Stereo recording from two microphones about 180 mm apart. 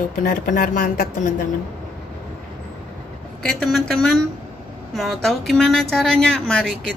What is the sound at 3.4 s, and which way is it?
A woman's voice, 5° left (ahead or behind).